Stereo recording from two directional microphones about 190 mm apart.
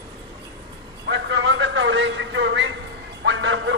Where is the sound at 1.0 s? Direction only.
70° right (ahead or behind).